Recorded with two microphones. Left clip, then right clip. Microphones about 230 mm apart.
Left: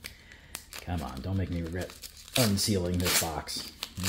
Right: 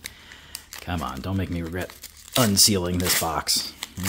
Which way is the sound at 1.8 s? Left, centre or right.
Centre.